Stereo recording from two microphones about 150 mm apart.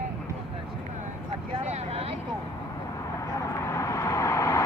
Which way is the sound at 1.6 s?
45° right (ahead or behind).